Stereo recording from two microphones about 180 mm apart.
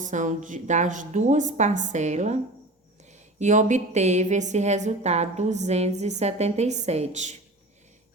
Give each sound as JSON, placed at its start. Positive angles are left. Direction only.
{"t": 0.0, "sound": "a woman's voice", "side_deg": -45}